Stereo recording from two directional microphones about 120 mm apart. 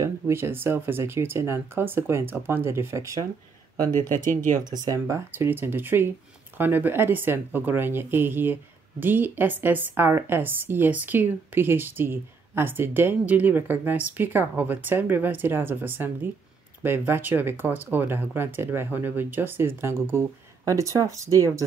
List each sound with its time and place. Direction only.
0.0 s speech: 20° right (ahead or behind)
3.8 s speech: 20° left (ahead or behind)
4.2 s speech: 90° right
4.6 s speech: 35° right (ahead or behind)
4.9 s a woman's voice: 25° right (ahead or behind)